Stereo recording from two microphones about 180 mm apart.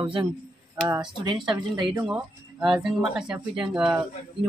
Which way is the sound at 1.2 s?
25° right (ahead or behind).